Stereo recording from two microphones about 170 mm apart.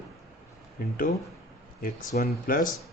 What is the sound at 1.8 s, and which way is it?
Speech, 55° left (ahead or behind).